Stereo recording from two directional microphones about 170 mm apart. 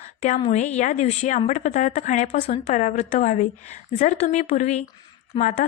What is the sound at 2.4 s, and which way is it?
A woman's voice, 40° left (ahead or behind).